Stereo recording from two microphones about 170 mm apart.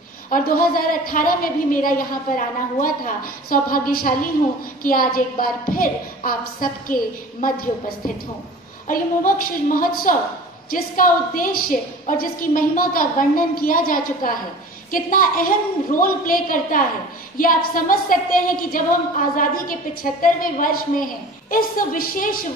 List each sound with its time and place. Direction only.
0.3 s a woman's voice: 55° left (ahead or behind)
8.8 s a woman's voice: 55° left (ahead or behind)